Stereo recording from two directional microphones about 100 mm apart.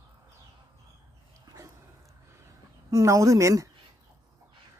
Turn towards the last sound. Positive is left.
turn(degrees=-30)  # may be behind; listen again after turning